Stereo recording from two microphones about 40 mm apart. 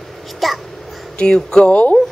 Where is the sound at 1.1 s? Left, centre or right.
Centre.